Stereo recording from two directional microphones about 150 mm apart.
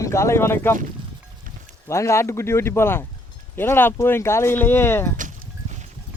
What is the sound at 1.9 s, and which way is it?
Speech, 20° left (ahead or behind).